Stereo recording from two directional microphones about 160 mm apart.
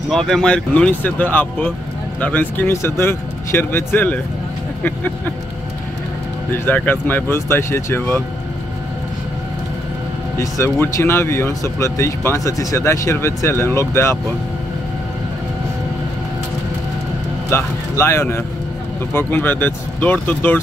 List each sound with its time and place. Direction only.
0.1 s speech: 5° left (ahead or behind)
6.6 s speech: 10° left (ahead or behind)
10.4 s speech: 20° left (ahead or behind)
17.5 s speech: 15° left (ahead or behind)